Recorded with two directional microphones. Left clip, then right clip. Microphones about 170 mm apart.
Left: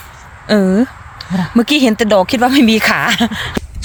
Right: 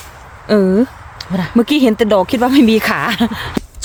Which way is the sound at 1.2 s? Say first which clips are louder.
Even; 55° right (ahead or behind).